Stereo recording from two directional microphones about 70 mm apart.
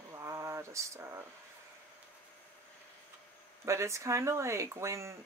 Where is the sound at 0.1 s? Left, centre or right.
Right.